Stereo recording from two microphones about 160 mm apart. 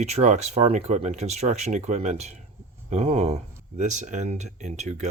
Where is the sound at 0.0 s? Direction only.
45° right (ahead or behind).